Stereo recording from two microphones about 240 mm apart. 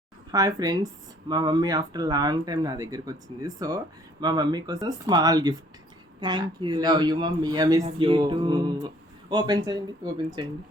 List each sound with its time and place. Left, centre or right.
0.3 s speech: centre